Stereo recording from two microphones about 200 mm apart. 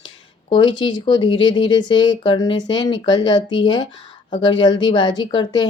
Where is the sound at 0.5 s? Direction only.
25° left (ahead or behind).